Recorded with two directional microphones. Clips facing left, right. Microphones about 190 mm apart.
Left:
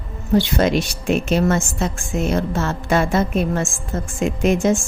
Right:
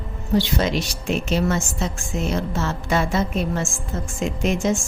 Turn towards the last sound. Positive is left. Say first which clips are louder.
# left 4 dB
turn(degrees=50)  # may be behind; listen again after turning